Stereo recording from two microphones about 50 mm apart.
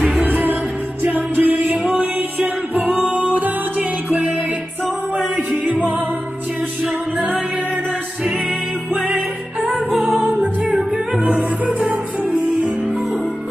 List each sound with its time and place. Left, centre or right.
0.1 s music: right
5.7 s music: right
10.4 s music: right